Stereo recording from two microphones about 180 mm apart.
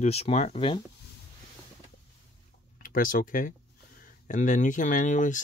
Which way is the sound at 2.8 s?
50° left (ahead or behind).